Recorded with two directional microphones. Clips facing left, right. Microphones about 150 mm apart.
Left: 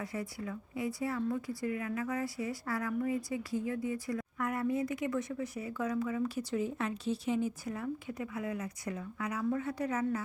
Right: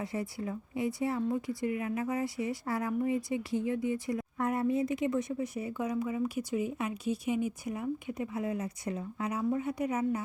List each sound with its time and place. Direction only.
0.0 s a woman's voice: 25° right (ahead or behind)